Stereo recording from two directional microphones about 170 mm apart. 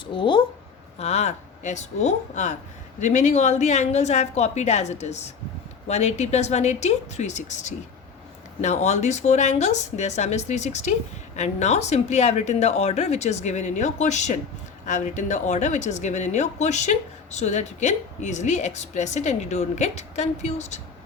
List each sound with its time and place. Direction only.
0.0 s speech: 30° left (ahead or behind)
0.9 s speech: 40° left (ahead or behind)